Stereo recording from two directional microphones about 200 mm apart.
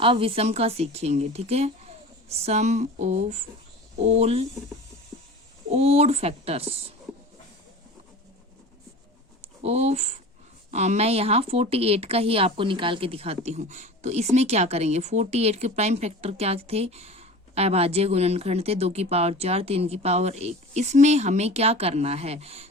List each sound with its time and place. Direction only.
0.0 s speech: 25° right (ahead or behind)
5.7 s speech: 30° right (ahead or behind)
9.4 s speech: 30° right (ahead or behind)